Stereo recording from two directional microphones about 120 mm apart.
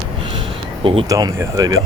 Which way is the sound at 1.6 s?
30° right (ahead or behind).